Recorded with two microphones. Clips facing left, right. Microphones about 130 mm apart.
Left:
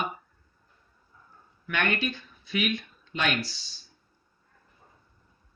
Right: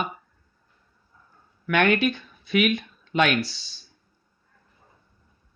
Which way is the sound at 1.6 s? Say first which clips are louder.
Right 8 dB; 70° right (ahead or behind).